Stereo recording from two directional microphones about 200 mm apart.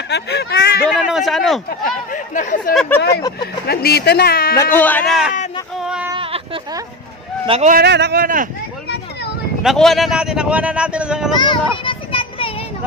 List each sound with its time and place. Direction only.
0.1 s speech: 55° left (ahead or behind)
0.9 s speech: centre (ahead or behind)
2.1 s speech: 40° left (ahead or behind)
2.7 s speech: 5° left (ahead or behind)
3.1 s speech: 20° left (ahead or behind)
3.6 s speech: 50° left (ahead or behind)
4.7 s speech: 10° left (ahead or behind)
5.8 s speech: 5° right (ahead or behind)
6.1 s a sound: 25° right (ahead or behind)
7.4 s a man's voice: 30° right (ahead or behind)
7.7 s speech: 55° right (ahead or behind)
9.6 s speech: centre (ahead or behind)
11.3 s a sound: 25° left (ahead or behind)